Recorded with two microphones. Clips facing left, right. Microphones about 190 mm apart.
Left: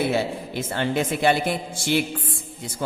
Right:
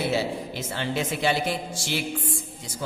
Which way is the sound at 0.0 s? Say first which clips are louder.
Left 2 dB; 55° left (ahead or behind).